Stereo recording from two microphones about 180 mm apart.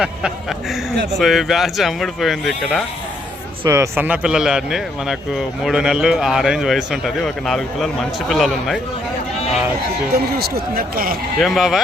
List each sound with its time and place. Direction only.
1.2 s speech: centre (ahead or behind)
3.7 s speech: 15° right (ahead or behind)
10.3 s speech: 55° right (ahead or behind)
11.3 s speech: centre (ahead or behind)